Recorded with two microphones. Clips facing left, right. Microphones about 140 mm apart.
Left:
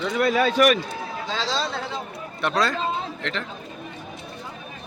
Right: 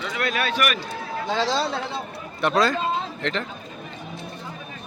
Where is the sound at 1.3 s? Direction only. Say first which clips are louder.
Right 5 dB; 55° right (ahead or behind).